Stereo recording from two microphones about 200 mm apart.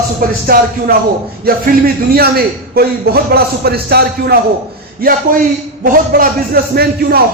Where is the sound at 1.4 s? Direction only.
50° right (ahead or behind).